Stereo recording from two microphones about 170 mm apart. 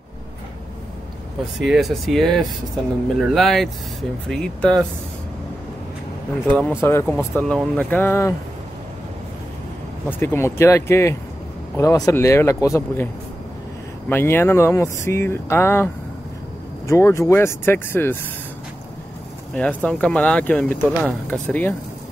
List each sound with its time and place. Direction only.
1.6 s speech: centre (ahead or behind)
6.8 s speech: 15° left (ahead or behind)
10.0 s speech: 10° left (ahead or behind)
19.5 s speech: 5° left (ahead or behind)